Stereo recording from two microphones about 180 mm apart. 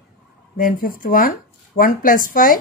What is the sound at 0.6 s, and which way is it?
A woman's voice, 50° left (ahead or behind).